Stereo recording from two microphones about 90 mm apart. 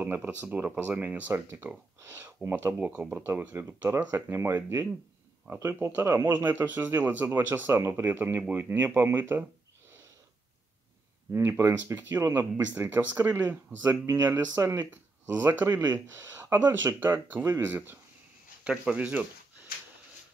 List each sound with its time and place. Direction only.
0.0 s speech: 20° right (ahead or behind)
2.0 s speech: 30° right (ahead or behind)
2.8 s speech: 15° right (ahead or behind)
11.3 s speech: 30° right (ahead or behind)
14.5 s speech: 40° right (ahead or behind)
14.9 s speech: 15° right (ahead or behind)
15.7 s speech: 50° right (ahead or behind)
16.1 s speech: 25° right (ahead or behind)
18.6 s speech: 10° right (ahead or behind)